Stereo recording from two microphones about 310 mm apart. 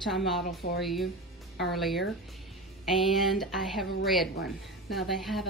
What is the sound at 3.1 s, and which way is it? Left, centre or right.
Speech, centre.